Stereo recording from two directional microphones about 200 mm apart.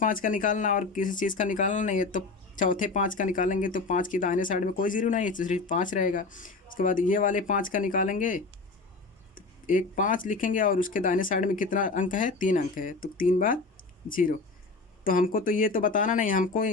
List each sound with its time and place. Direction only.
0.0 s speech: 40° left (ahead or behind)